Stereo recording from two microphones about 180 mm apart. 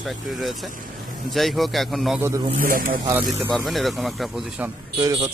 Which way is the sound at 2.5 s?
50° right (ahead or behind).